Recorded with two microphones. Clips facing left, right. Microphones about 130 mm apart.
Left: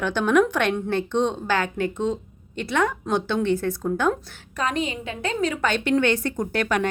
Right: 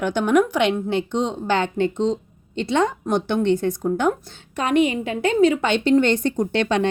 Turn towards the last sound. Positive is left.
turn(degrees=-25)  # may be behind; listen again after turning